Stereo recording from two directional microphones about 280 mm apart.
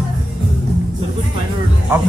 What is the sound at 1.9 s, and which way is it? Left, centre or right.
Speech, centre.